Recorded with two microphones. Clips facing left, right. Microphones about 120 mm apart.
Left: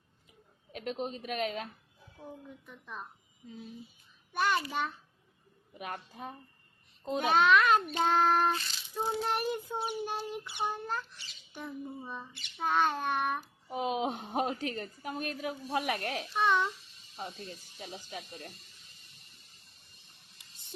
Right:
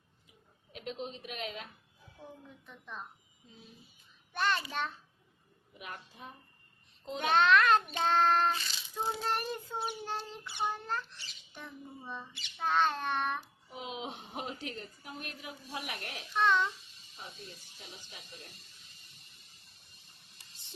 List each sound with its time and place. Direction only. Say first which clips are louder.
0.7 s a woman's voice: left 4 dB; 45° left (ahead or behind)
2.6 s child singing: even; centre (ahead or behind)
4.3 s a child's voice: left 2 dB; 10° left (ahead or behind)
5.8 s a woman's voice: left 6 dB; 45° left (ahead or behind)
7.2 s child singing: left 1 dB; 5° left (ahead or behind)
9.0 s speech: left 2 dB; 10° left (ahead or behind)
13.7 s a woman's voice: left 11 dB; 55° left (ahead or behind)
16.3 s speech: even; 15° left (ahead or behind)
17.7 s speech: left 9 dB; 55° left (ahead or behind)